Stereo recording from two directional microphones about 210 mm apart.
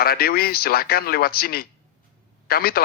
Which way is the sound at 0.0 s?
45° left (ahead or behind).